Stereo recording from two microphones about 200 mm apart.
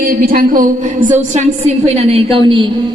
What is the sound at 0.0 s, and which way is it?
A woman's voice, 45° right (ahead or behind).